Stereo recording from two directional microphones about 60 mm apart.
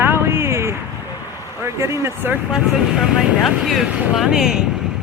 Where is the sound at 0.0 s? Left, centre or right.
Right.